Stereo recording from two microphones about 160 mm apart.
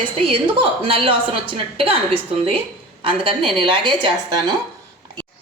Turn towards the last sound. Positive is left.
turn(degrees=-25)  # may be behind; listen again after turning